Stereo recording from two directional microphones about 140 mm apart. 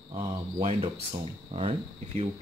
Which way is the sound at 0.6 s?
40° right (ahead or behind).